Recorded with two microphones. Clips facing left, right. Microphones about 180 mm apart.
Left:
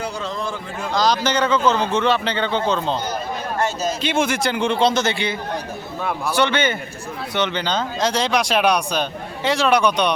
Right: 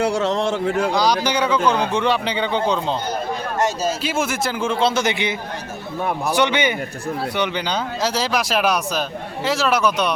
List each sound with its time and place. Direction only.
0.0 s speech: 75° right (ahead or behind)
0.9 s speech: 10° right (ahead or behind)
5.0 s a man's voice: 20° right (ahead or behind); by 10.1 s centre (ahead or behind)